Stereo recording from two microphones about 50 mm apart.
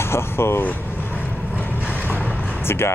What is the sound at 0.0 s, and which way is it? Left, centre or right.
Speech, left.